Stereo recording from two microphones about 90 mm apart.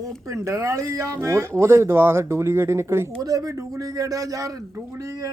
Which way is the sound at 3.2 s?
40° right (ahead or behind).